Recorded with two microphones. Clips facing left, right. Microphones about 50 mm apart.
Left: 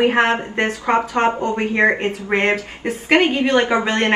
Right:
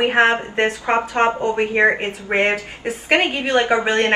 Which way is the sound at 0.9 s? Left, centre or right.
Right.